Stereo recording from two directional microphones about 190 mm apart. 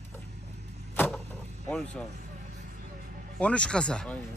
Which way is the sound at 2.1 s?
50° right (ahead or behind).